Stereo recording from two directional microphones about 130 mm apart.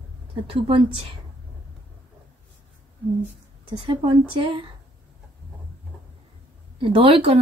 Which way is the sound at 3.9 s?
45° right (ahead or behind).